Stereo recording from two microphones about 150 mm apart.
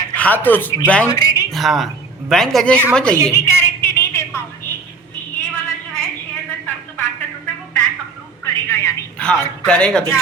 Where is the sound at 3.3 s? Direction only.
15° left (ahead or behind).